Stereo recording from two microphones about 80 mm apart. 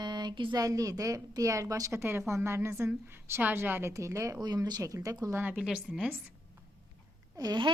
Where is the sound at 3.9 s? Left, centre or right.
Right.